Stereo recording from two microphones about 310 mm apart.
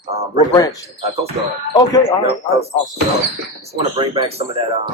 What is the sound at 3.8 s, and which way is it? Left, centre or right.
Speech, centre.